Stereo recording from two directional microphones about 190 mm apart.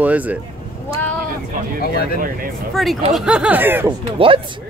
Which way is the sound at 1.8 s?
55° left (ahead or behind).